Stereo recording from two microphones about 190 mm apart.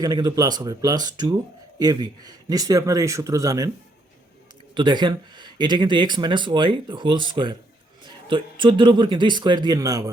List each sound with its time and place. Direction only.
0.0 s speech: 20° right (ahead or behind)
4.7 s speech: 25° right (ahead or behind)